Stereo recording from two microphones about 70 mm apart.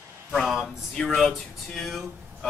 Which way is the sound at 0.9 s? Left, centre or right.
Centre.